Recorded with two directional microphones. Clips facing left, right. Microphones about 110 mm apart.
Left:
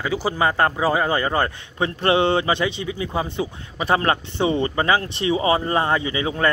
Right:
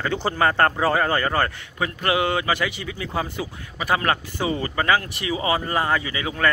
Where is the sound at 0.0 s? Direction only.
10° left (ahead or behind).